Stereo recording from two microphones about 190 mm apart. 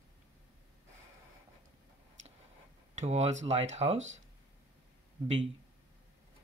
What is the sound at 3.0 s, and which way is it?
Speech, 35° right (ahead or behind).